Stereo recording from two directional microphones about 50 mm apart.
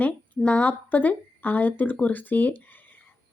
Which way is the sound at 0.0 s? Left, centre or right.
Left.